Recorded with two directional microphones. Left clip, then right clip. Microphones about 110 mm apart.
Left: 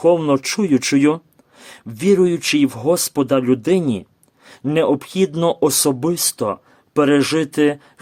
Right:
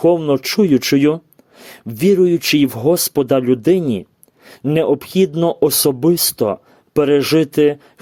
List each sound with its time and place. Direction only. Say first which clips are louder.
0.3 s speech: right 3 dB; 30° right (ahead or behind)